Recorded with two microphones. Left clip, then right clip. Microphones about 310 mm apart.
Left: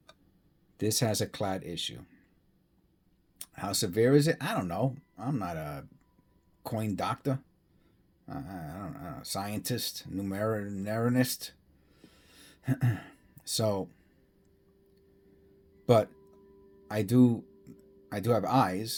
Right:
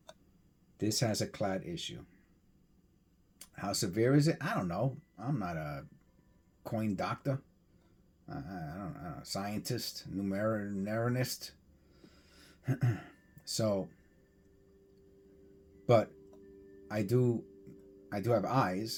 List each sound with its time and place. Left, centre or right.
0.8 s speech: left
3.3 s speech: left
12.6 s speech: left
16.9 s speech: left